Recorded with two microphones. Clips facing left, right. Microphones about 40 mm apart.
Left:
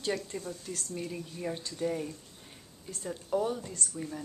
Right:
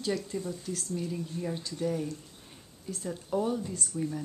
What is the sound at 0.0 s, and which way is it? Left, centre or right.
Speech, centre.